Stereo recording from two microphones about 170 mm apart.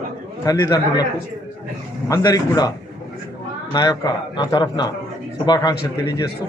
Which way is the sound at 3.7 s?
25° left (ahead or behind).